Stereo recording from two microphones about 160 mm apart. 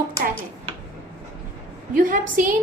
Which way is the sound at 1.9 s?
60° right (ahead or behind).